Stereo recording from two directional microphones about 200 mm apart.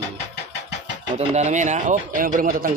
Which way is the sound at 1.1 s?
35° right (ahead or behind).